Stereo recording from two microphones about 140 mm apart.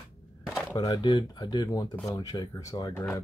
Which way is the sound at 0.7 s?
30° left (ahead or behind).